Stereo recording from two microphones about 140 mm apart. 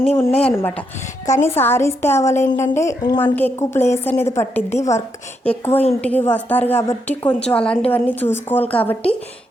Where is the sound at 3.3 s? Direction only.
15° left (ahead or behind).